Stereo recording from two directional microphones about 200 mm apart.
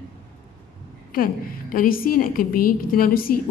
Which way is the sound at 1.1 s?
45° left (ahead or behind).